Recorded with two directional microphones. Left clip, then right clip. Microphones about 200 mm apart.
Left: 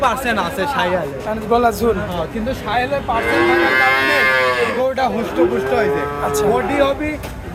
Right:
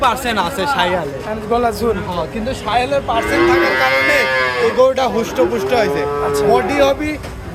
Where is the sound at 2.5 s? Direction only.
25° right (ahead or behind).